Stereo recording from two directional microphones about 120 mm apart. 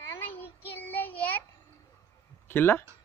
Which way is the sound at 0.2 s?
20° left (ahead or behind).